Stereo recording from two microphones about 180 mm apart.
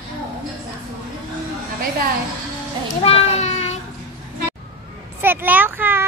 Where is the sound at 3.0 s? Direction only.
35° left (ahead or behind).